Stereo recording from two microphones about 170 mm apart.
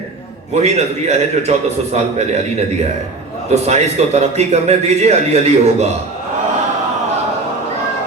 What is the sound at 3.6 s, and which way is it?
A man's voice, 40° right (ahead or behind).